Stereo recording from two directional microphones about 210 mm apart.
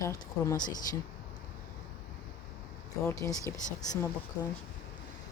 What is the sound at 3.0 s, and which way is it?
Speech, 15° left (ahead or behind).